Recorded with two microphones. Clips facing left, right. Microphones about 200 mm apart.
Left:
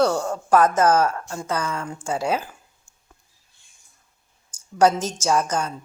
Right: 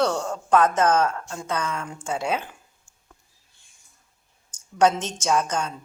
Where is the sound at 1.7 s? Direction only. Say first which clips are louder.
Left 2 dB; 30° left (ahead or behind).